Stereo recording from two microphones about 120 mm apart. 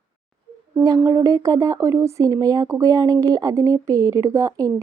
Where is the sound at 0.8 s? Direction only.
25° right (ahead or behind).